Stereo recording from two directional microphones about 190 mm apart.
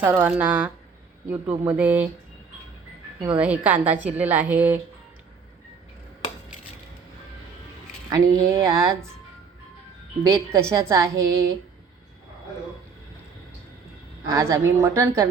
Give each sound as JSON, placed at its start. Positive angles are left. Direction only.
{"t": 0.0, "sound": "a woman's voice", "side_deg": -10}
{"t": 3.3, "sound": "a woman's voice", "side_deg": -5}
{"t": 8.1, "sound": "a woman's voice", "side_deg": -15}
{"t": 10.2, "sound": "a woman's voice", "side_deg": -15}
{"t": 14.3, "sound": "a woman's voice", "side_deg": -15}